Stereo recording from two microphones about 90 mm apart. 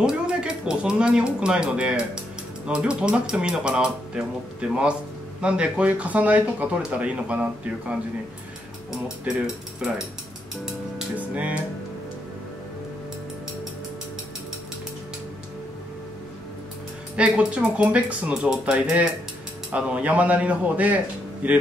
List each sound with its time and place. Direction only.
0.0 s speech: 10° right (ahead or behind)
11.1 s music: 15° right (ahead or behind)
17.2 s speech: 10° right (ahead or behind)